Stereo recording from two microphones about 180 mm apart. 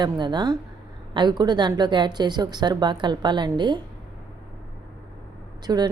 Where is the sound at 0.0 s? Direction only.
25° right (ahead or behind).